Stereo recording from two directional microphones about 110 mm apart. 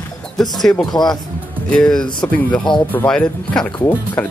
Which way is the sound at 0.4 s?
5° left (ahead or behind).